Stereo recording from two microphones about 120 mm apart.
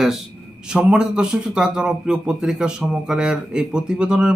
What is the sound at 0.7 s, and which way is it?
A man's voice, 5° right (ahead or behind).